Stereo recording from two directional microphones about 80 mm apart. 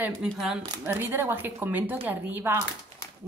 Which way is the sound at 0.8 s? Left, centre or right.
Right.